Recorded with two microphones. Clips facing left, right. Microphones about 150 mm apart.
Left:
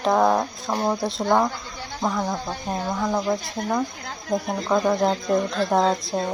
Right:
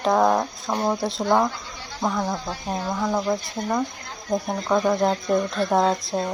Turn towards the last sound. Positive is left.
turn(degrees=0)  # may be behind; listen again after turning